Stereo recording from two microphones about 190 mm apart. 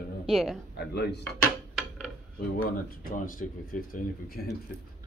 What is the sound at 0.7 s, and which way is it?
Speech, 60° left (ahead or behind).